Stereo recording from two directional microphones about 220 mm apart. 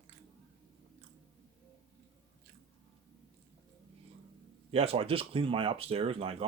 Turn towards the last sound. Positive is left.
turn(degrees=-25)  # may be behind; listen again after turning